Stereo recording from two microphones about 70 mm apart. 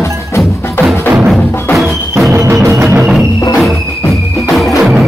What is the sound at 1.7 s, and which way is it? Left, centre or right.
Music, centre.